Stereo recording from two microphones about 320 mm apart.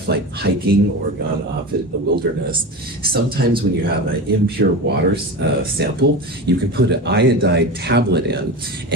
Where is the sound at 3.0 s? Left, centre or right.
Right.